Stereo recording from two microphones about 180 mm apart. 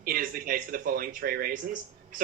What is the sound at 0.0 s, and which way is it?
Speech, 55° right (ahead or behind).